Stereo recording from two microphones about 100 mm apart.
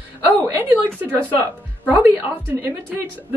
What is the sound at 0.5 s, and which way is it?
Speech, 20° right (ahead or behind).